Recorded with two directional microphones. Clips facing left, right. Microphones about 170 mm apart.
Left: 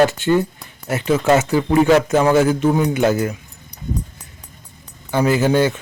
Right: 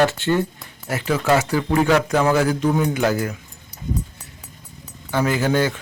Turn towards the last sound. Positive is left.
turn(degrees=20)  # may be behind; listen again after turning